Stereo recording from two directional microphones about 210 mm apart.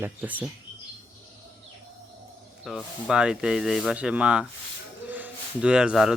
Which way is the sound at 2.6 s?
Centre (ahead or behind).